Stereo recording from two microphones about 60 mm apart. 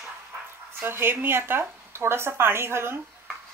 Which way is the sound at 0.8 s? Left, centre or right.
Right.